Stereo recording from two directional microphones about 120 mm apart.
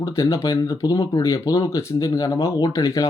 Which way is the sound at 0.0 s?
25° left (ahead or behind).